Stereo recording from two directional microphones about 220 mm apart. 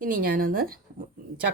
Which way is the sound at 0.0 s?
40° right (ahead or behind).